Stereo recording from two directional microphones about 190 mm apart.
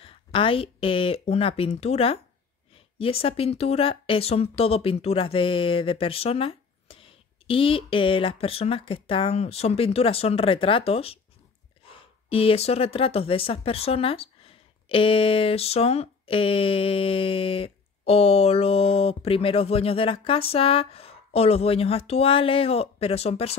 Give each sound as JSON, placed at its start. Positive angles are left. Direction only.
{"t": 0.0, "sound": "speech", "side_deg": 30}